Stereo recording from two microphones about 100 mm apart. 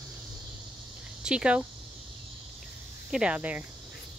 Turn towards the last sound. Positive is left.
turn(degrees=-15)  # may be behind; listen again after turning